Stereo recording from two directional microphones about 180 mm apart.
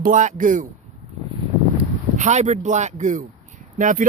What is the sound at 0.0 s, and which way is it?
Speech, 45° right (ahead or behind).